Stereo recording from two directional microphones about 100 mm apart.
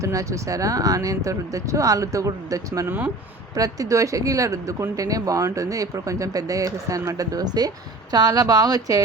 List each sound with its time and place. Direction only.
0.0 s speech: 30° right (ahead or behind)